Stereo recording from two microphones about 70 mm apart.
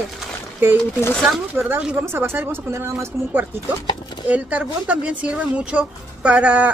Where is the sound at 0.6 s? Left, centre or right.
Right.